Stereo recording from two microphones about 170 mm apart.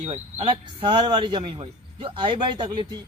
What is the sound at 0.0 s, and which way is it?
Speech, 35° right (ahead or behind).